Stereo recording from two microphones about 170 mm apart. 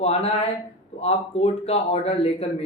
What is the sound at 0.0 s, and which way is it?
A man's voice, 35° left (ahead or behind).